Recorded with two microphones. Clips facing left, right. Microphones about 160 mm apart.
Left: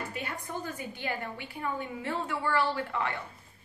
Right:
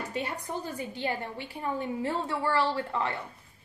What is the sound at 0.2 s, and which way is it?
A woman's voice, 30° right (ahead or behind).